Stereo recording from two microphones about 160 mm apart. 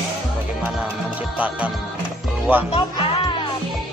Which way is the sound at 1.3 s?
10° right (ahead or behind).